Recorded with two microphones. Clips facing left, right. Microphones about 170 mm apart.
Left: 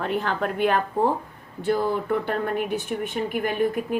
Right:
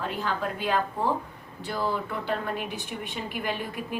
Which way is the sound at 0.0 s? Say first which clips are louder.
Left 5 dB; 60° left (ahead or behind).